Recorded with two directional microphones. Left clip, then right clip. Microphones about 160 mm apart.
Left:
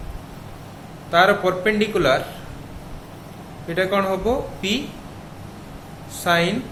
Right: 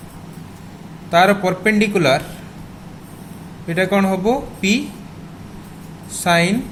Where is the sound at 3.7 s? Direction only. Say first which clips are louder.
Right 3 dB; 35° right (ahead or behind).